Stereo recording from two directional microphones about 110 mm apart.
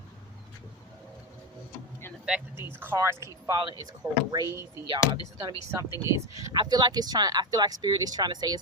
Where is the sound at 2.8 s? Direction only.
25° right (ahead or behind).